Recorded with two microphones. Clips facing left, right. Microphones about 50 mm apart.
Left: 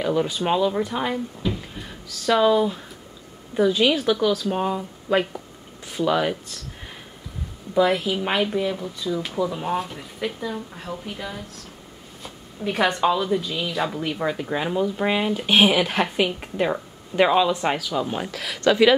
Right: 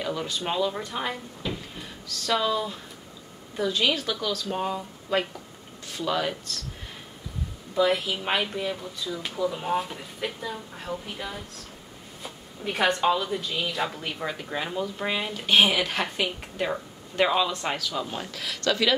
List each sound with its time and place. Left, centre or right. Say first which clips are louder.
0.0 s speech: left 7 dB; centre
7.7 s speech: left 4 dB; centre; by 18.9 s left